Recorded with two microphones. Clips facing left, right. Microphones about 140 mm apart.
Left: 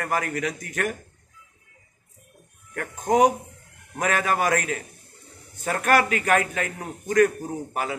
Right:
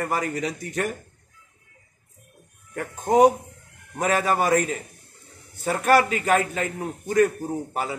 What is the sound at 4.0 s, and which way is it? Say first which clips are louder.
Speech: right 2 dB; 30° right (ahead or behind).